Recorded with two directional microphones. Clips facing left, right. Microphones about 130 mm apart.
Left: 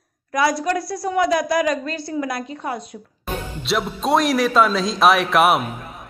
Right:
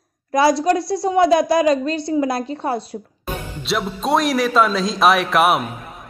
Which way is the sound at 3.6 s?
Centre (ahead or behind).